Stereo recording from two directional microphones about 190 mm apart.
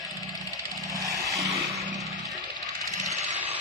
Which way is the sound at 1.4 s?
15° right (ahead or behind).